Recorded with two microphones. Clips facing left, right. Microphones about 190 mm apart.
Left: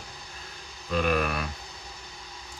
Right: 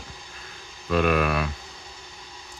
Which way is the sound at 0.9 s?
70° right (ahead or behind).